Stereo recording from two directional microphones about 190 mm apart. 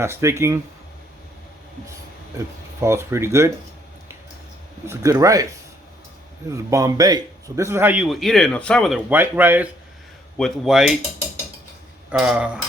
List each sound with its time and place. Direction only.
0.0 s a man's voice: 15° right (ahead or behind)
2.8 s a man's voice: 15° right (ahead or behind)
4.9 s a man's voice: 15° right (ahead or behind); by 9.0 s 5° left (ahead or behind)
9.0 s a man's voice: 10° right (ahead or behind)
12.1 s speech: 5° right (ahead or behind)